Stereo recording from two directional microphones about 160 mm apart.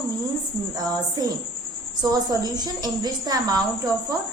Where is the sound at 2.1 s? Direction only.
25° right (ahead or behind).